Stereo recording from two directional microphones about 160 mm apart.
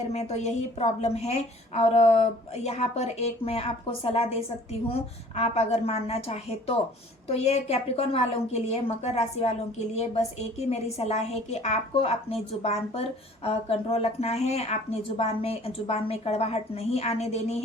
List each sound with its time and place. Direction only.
0.0 s a woman's voice: 40° left (ahead or behind)